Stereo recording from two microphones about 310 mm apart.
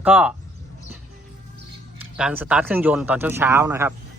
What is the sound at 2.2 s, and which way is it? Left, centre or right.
Speech, centre.